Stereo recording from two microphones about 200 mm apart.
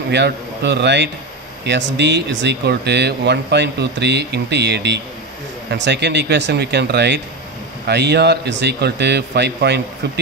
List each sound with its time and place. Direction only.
0.1 s speech: 60° right (ahead or behind)